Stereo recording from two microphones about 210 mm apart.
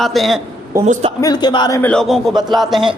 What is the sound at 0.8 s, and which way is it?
Speech, 35° right (ahead or behind).